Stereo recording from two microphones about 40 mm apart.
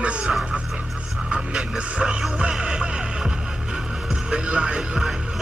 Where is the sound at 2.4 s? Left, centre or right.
Right.